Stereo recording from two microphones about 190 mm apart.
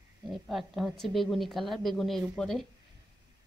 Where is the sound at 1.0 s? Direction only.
Centre (ahead or behind).